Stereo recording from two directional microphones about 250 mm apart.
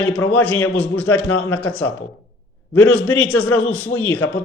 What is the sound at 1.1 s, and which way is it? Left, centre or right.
Speech, left.